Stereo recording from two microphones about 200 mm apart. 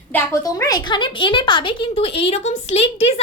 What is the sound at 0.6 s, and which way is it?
A woman's voice, 20° left (ahead or behind).